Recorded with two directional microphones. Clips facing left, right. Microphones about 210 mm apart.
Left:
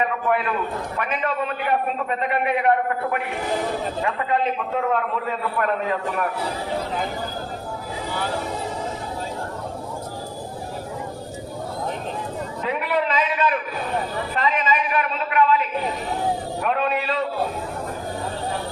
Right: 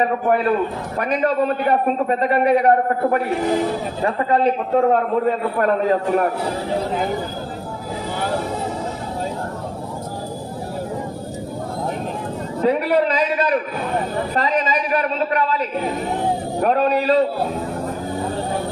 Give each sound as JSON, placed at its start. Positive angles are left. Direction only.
{"t": 0.0, "sound": "a man's voice", "side_deg": -40}
{"t": 12.6, "sound": "a man's voice", "side_deg": -35}